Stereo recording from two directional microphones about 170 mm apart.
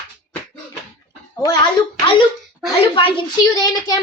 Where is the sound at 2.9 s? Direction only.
30° left (ahead or behind).